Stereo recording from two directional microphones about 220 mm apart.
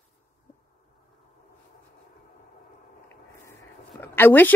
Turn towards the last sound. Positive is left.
turn(degrees=10)  # may be behind; listen again after turning